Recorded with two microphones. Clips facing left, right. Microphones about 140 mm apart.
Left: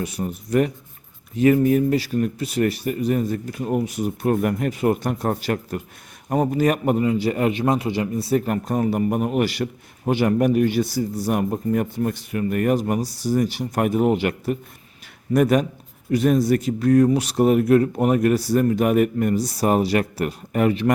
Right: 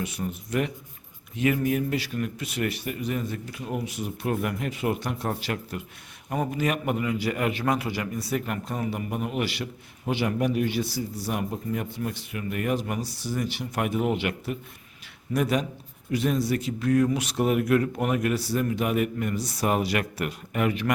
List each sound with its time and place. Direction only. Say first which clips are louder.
0.0 s a man's voice: left 4 dB; 40° left (ahead or behind)